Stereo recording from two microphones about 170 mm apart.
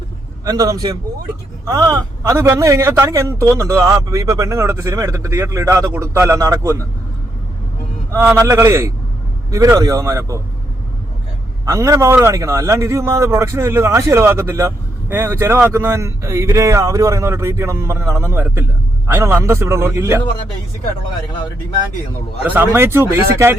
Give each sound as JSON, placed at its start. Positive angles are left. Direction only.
{"t": 0.4, "sound": "a man's voice", "side_deg": -20}
{"t": 8.1, "sound": "a man's voice", "side_deg": -15}
{"t": 11.6, "sound": "a man's voice", "side_deg": -20}
{"t": 22.4, "sound": "a man's voice", "side_deg": -10}